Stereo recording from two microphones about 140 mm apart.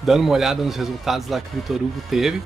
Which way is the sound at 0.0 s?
Centre (ahead or behind).